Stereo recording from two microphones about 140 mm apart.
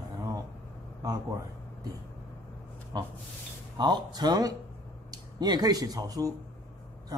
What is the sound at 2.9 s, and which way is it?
Speech, 30° right (ahead or behind).